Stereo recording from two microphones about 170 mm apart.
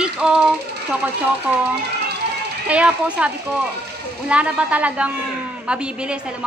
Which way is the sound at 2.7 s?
5° right (ahead or behind).